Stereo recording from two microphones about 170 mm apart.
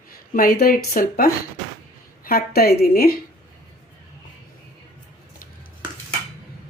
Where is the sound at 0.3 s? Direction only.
60° left (ahead or behind).